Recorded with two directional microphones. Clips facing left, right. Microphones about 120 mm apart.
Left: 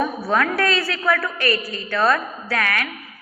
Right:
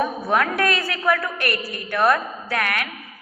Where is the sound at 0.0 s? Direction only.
15° right (ahead or behind).